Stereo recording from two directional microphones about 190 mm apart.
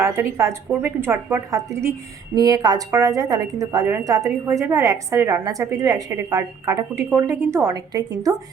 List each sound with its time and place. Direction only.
0.0 s a woman's voice: 15° right (ahead or behind)